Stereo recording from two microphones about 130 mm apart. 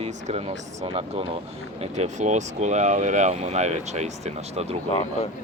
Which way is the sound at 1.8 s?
60° right (ahead or behind).